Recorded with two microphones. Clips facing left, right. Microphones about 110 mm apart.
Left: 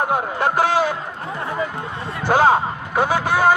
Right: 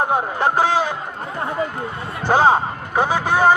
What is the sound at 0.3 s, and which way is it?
Speech, 15° right (ahead or behind).